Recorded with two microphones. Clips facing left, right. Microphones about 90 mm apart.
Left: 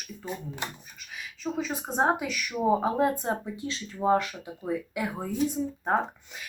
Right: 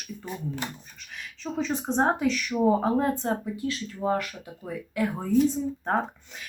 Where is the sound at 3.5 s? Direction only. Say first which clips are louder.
Right 4 dB; 20° left (ahead or behind).